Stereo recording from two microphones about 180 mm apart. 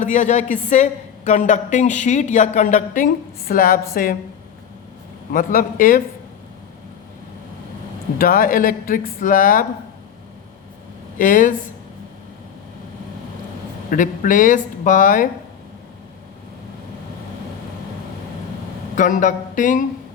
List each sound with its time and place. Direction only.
0.0 s a woman's voice: 40° left (ahead or behind)
5.3 s a woman's voice: 50° left (ahead or behind)
8.2 s a woman's voice: 50° left (ahead or behind)
11.2 s a woman's voice: 50° left (ahead or behind)
13.9 s a woman's voice: 45° left (ahead or behind)
18.9 s a woman's voice: 45° left (ahead or behind)